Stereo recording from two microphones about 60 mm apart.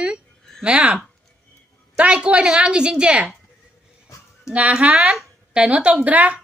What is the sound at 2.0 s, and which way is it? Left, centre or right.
Speech, centre.